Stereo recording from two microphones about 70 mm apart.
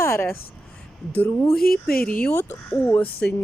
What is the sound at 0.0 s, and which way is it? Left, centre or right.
Speech, left.